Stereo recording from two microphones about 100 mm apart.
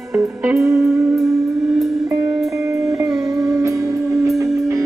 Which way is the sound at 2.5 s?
30° right (ahead or behind).